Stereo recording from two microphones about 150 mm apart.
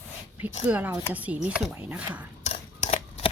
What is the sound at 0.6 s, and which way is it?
Speech, 10° right (ahead or behind).